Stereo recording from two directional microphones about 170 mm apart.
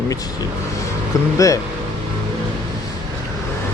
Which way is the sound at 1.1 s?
20° left (ahead or behind).